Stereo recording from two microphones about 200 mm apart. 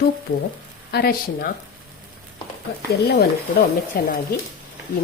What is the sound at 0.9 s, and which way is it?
Speech, 50° left (ahead or behind).